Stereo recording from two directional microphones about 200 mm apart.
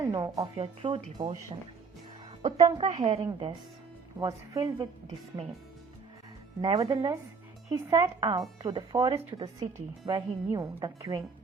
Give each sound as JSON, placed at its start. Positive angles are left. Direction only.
{"t": 0.0, "sound": "a sound", "side_deg": -20}
{"t": 0.6, "sound": "speech", "side_deg": -25}
{"t": 2.4, "sound": "speech", "side_deg": -35}
{"t": 4.2, "sound": "speech", "side_deg": -15}
{"t": 6.6, "sound": "speech", "side_deg": -25}
{"t": 6.9, "sound": "speech", "side_deg": -15}